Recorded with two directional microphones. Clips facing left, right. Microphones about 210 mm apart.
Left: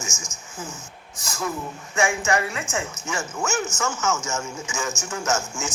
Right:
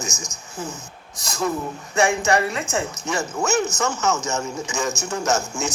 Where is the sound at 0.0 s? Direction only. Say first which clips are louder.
Right 4 dB; 35° right (ahead or behind).